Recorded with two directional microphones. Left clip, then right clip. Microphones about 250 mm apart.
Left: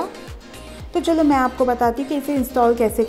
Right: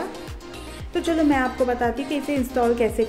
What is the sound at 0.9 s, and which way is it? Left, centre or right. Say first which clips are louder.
A woman's voice: left 4 dB; centre.